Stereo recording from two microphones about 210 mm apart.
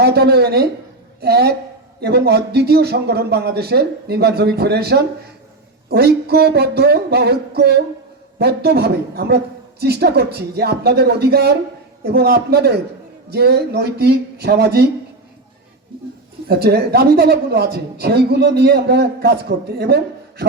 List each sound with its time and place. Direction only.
0.0 s a woman's voice: 50° right (ahead or behind)
16.5 s a woman's voice: 50° right (ahead or behind)